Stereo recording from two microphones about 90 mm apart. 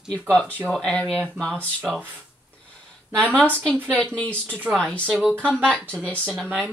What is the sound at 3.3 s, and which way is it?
Speech, 15° left (ahead or behind).